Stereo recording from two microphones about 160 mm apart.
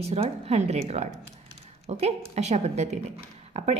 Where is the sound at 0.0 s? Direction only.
40° right (ahead or behind).